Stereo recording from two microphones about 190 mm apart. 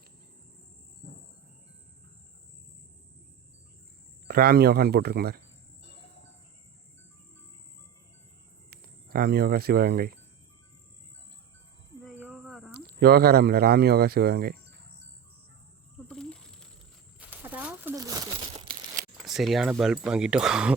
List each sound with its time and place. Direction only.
4.3 s speech: 55° right (ahead or behind)
8.7 s speech: 55° right (ahead or behind)
12.0 s cricket: 5° right (ahead or behind)
12.8 s speech: 55° right (ahead or behind)
16.0 s a sound: 5° left (ahead or behind)
17.2 s a sound: 10° right (ahead or behind)
18.4 s crumpling: 30° right (ahead or behind)
19.2 s speech: centre (ahead or behind)